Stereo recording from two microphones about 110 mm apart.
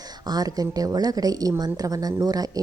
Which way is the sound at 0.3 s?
35° right (ahead or behind).